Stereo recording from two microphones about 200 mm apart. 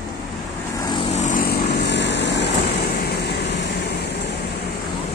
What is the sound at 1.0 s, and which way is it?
Vehicle, 35° left (ahead or behind).